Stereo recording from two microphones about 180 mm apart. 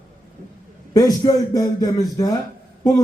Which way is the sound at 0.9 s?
20° left (ahead or behind).